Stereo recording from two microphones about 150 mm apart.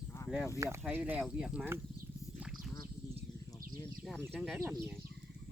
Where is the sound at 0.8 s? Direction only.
10° right (ahead or behind).